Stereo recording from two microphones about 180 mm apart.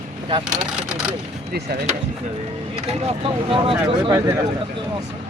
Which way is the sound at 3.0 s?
30° right (ahead or behind).